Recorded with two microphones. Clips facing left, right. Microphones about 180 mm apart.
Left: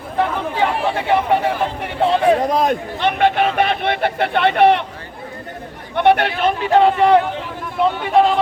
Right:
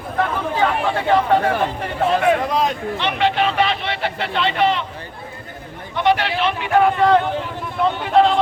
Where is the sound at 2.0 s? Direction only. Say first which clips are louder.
Left 2 dB; 30° left (ahead or behind); by 4.9 s 60° left (ahead or behind).